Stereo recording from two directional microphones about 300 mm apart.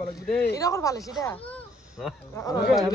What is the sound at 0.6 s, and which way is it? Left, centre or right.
Speech, centre.